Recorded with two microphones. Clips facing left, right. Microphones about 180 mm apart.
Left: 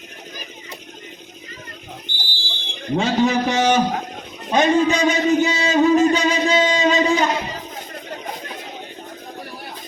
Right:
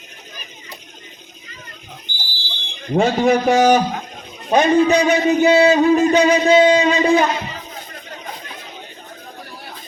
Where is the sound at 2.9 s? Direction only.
55° right (ahead or behind).